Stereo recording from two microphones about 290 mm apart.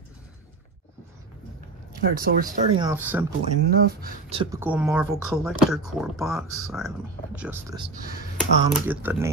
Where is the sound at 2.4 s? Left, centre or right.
Centre.